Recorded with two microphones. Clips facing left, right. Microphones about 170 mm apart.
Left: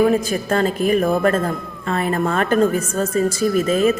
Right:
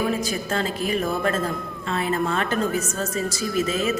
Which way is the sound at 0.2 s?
50° left (ahead or behind).